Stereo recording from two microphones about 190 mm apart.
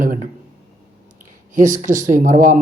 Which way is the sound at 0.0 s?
45° right (ahead or behind).